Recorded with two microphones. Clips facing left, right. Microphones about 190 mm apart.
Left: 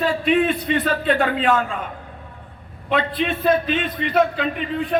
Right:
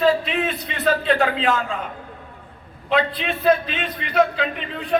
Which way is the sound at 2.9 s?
50° left (ahead or behind).